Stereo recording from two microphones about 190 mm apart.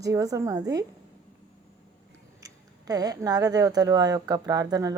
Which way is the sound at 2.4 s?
20° right (ahead or behind).